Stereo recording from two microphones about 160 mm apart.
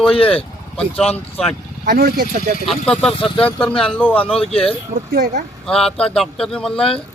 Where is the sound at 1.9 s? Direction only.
70° right (ahead or behind).